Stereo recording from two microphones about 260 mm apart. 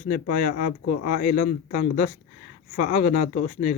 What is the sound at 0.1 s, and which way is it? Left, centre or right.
Speech, left.